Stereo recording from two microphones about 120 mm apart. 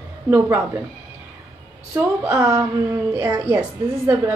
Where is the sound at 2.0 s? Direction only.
20° right (ahead or behind).